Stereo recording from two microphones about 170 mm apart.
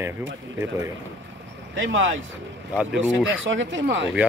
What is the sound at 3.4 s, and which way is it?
Speech, 90° right.